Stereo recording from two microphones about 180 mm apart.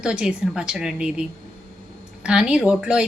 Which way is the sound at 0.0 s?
5° right (ahead or behind).